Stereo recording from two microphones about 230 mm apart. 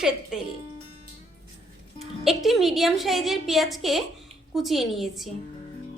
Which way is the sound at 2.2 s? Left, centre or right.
Centre.